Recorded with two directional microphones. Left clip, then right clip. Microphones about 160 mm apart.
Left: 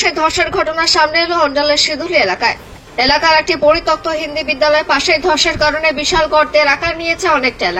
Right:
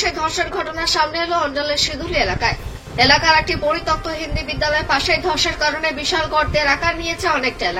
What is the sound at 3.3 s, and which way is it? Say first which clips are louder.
A woman's voice: left 7 dB; 50° left (ahead or behind).